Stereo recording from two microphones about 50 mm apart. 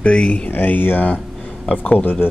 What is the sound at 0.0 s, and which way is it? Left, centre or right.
Speech, left.